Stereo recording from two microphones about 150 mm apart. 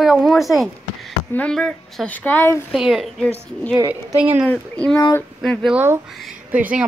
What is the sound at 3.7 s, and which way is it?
Speech, 10° right (ahead or behind).